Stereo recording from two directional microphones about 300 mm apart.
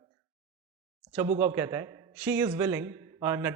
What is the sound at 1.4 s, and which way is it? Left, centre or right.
A man's voice, centre.